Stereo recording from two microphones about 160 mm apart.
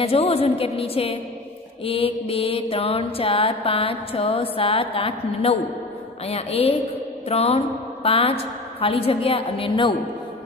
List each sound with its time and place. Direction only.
0.0 s mantra: 40° left (ahead or behind)